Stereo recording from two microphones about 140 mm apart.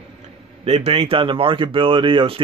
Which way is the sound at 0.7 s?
45° right (ahead or behind).